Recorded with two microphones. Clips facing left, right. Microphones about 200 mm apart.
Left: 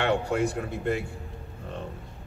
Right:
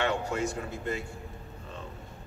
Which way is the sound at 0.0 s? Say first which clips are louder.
Left 4 dB; 60° left (ahead or behind).